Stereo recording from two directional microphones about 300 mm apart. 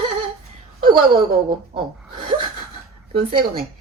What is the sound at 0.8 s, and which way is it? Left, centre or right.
Speech, centre.